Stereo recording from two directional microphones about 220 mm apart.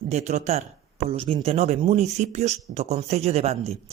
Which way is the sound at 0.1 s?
30° right (ahead or behind).